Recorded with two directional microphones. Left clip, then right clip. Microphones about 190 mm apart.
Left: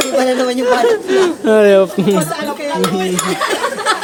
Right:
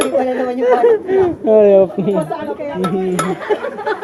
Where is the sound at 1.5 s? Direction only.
30° left (ahead or behind).